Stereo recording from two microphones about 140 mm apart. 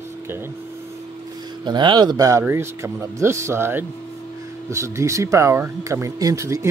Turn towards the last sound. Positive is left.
turn(degrees=-20)  # may be behind; listen again after turning